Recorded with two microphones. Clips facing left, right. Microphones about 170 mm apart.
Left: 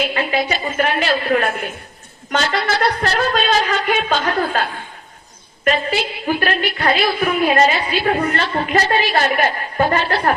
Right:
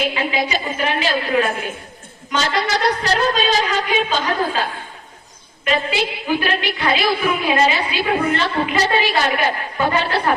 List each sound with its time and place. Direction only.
0.1 s a woman's voice: 50° left (ahead or behind)
5.6 s a woman's voice: 50° left (ahead or behind)